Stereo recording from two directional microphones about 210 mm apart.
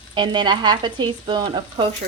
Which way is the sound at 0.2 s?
20° right (ahead or behind).